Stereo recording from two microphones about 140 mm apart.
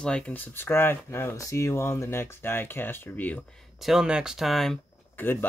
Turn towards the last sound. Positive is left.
turn(degrees=15)  # may be behind; listen again after turning